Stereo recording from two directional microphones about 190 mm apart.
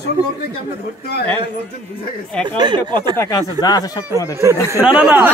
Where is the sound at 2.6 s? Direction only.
25° right (ahead or behind).